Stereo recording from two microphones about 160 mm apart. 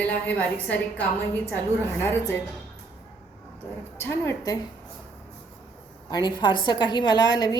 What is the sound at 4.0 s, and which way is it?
Speech, 15° left (ahead or behind).